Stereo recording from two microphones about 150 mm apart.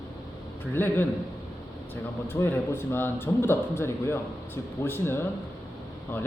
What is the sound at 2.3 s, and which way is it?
A man's voice, 15° left (ahead or behind).